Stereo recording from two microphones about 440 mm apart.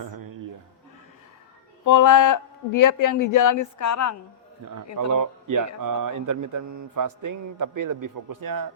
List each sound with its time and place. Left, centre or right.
1.8 s speech: left
4.9 s speech: right